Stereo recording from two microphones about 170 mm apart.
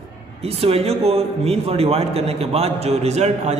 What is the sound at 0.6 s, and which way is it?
A man's voice, 35° right (ahead or behind).